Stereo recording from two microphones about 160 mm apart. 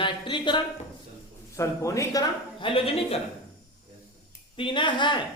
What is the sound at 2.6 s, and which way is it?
Speech, 35° left (ahead or behind).